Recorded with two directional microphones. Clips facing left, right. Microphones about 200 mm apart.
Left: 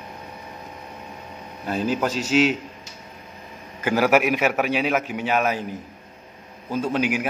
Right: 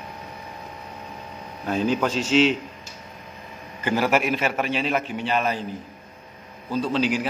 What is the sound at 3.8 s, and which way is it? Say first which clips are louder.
A man's voice: left 3 dB; 10° left (ahead or behind).